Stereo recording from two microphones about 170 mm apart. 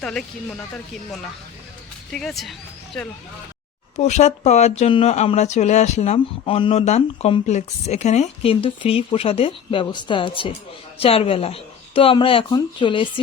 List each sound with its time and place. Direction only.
0.0 s speech: 5° left (ahead or behind)
2.1 s speech: centre (ahead or behind)
3.9 s a woman's voice: 45° left (ahead or behind)